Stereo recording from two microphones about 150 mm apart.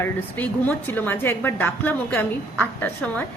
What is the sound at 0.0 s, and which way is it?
A woman's voice, 15° left (ahead or behind).